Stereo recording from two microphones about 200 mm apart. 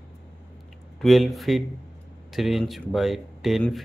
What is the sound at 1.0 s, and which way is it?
Speech, centre (ahead or behind).